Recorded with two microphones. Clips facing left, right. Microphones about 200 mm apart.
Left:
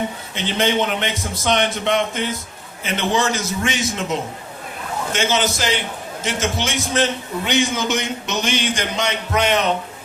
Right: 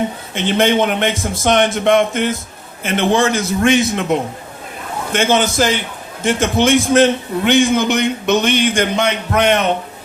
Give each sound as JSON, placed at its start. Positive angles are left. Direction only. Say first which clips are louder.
{"t": 0.3, "sound": "a man's voice", "louder": "right 5 dB", "side_deg": -50}